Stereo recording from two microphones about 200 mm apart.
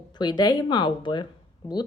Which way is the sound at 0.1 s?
20° left (ahead or behind).